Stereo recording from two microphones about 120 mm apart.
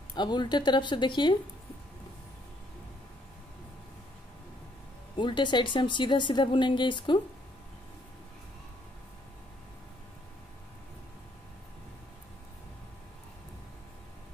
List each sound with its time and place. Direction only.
0.1 s speech: 40° left (ahead or behind)
5.1 s speech: 40° left (ahead or behind)